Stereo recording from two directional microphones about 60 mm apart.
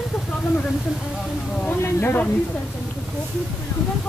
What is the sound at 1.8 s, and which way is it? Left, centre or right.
Speech, left.